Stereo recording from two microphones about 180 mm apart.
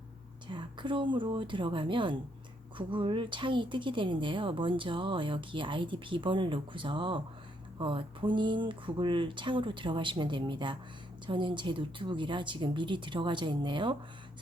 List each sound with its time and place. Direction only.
0.4 s a woman's voice: 25° right (ahead or behind)